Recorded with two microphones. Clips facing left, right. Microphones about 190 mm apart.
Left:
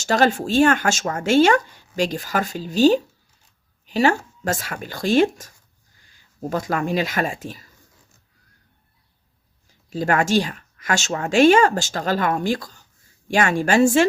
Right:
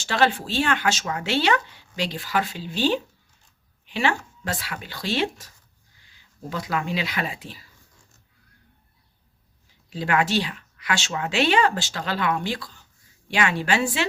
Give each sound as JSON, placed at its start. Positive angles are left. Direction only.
{"t": 0.0, "sound": "speech", "side_deg": 45}
{"t": 9.6, "sound": "speech", "side_deg": 45}